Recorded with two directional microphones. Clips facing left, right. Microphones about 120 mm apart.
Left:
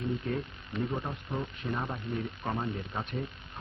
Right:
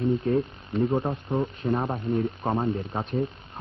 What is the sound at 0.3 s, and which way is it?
Speech, 35° right (ahead or behind).